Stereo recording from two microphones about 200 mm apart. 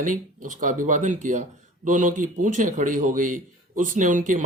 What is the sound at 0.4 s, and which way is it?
Speech, 40° right (ahead or behind).